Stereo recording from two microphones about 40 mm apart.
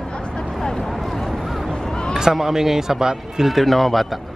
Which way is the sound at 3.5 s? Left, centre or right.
Centre.